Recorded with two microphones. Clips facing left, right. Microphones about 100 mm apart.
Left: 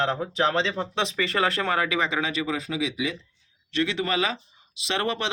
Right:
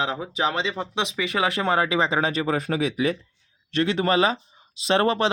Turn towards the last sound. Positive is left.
turn(degrees=-35)  # may be behind; listen again after turning